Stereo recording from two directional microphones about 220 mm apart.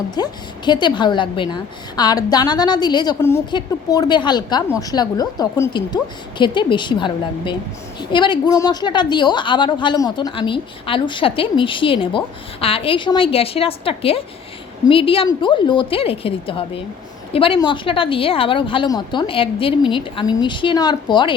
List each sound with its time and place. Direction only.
0.2 s a woman's voice: 20° left (ahead or behind)